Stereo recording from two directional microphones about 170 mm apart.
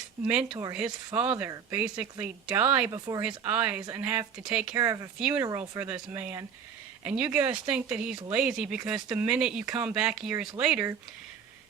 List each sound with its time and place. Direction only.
0.3 s speech: 5° right (ahead or behind)
4.7 s speech: 15° right (ahead or behind)